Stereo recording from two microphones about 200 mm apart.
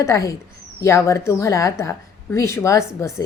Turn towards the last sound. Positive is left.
turn(degrees=15)  # may be behind; listen again after turning